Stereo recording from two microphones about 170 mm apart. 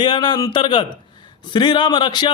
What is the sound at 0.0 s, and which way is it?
A man's voice, 25° left (ahead or behind).